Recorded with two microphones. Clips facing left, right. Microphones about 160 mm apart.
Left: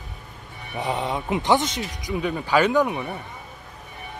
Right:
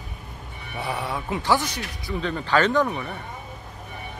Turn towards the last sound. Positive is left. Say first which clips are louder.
# left 1 dB
turn(degrees=20)  # may be behind; listen again after turning